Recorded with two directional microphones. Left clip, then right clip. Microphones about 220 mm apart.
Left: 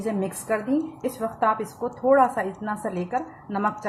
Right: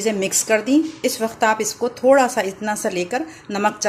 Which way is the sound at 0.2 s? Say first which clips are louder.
Right 8 dB; 45° right (ahead or behind).